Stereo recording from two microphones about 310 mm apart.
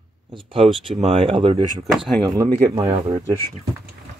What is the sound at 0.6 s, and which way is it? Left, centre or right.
Speech, centre.